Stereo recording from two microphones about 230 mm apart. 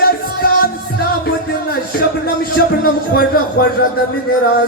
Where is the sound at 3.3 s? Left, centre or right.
Left.